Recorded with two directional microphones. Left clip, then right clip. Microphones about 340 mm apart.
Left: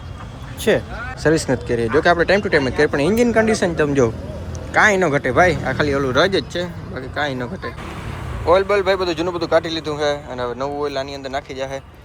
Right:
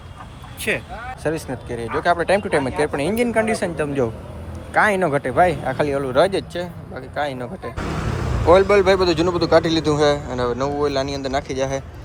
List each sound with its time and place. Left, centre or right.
0.7 s speech: left
1.2 s a man's voice: centre
8.4 s a man's voice: centre